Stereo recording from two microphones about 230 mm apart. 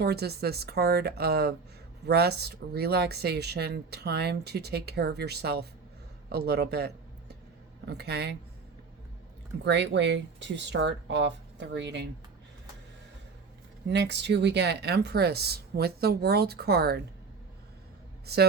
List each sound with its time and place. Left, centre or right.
0.0 s speech: right
6.2 s a sound: right
7.9 s speech: right
9.6 s speech: right
13.8 s speech: right